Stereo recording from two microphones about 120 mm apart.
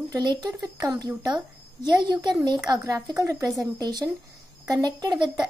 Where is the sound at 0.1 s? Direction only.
35° right (ahead or behind).